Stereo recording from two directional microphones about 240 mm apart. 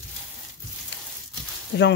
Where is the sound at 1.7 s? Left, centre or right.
Left.